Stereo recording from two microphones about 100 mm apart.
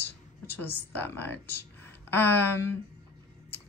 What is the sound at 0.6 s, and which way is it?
Speech, 20° left (ahead or behind).